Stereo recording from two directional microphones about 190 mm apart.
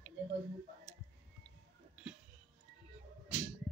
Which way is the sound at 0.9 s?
15° left (ahead or behind).